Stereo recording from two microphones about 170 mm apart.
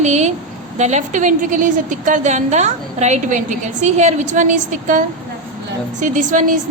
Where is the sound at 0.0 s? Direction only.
40° right (ahead or behind).